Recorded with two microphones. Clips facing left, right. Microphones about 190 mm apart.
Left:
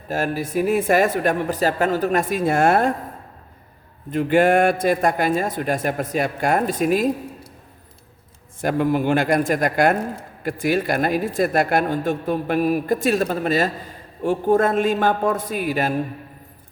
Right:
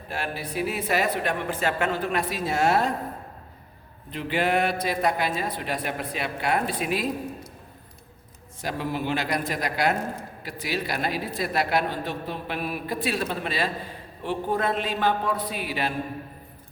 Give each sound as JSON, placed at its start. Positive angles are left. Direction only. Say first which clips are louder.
{"t": 0.1, "sound": "speech", "louder": "left 9 dB", "side_deg": 45}
{"t": 4.1, "sound": "speech", "louder": "left 9 dB", "side_deg": 50}
{"t": 8.6, "sound": "speech", "louder": "left 9 dB", "side_deg": 50}